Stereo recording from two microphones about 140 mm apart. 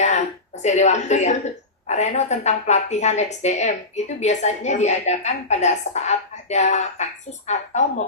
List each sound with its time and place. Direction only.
0.0 s throat clearing: 55° left (ahead or behind)
1.9 s speech: 55° left (ahead or behind)